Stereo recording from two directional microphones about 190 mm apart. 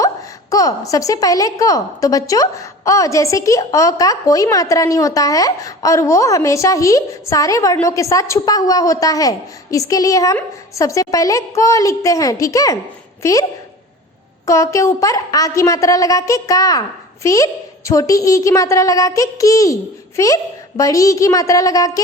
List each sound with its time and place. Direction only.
0.5 s a woman's voice: 20° left (ahead or behind)
14.4 s a woman's voice: 15° left (ahead or behind)